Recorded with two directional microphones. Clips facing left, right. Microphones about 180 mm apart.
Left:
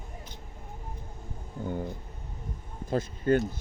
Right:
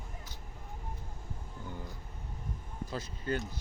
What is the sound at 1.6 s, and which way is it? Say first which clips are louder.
Speech: left 12 dB; 55° left (ahead or behind).